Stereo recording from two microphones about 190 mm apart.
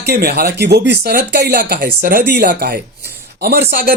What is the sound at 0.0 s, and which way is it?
Speech, 55° right (ahead or behind).